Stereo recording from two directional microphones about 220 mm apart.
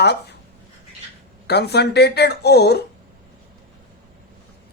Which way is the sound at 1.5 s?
50° left (ahead or behind).